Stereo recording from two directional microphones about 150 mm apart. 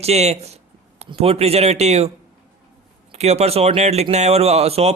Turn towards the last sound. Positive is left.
turn(degrees=-45)  # may be behind; listen again after turning